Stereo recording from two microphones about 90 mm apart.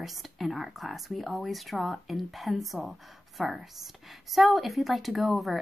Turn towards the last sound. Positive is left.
turn(degrees=0)  # may be behind; listen again after turning